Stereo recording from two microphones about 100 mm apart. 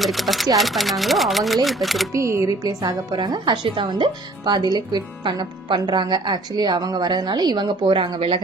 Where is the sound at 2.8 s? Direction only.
50° right (ahead or behind).